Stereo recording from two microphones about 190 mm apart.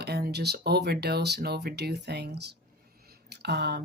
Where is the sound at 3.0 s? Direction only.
55° right (ahead or behind).